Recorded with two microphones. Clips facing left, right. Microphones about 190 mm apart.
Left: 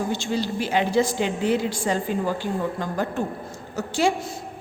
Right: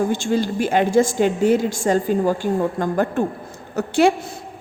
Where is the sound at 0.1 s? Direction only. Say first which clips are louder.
Right 5 dB; 50° right (ahead or behind).